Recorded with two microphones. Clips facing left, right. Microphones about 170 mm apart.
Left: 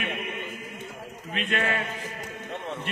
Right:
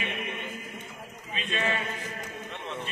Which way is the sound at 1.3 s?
70° left (ahead or behind).